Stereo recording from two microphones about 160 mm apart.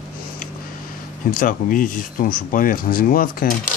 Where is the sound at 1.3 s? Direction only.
60° left (ahead or behind).